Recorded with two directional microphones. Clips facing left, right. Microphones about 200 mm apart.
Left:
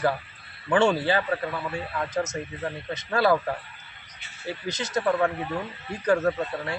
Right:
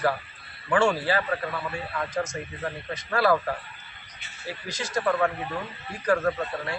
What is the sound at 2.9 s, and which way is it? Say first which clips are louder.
Speech: left 1 dB; 20° left (ahead or behind).